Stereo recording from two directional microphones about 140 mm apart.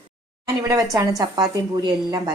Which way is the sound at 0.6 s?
25° right (ahead or behind).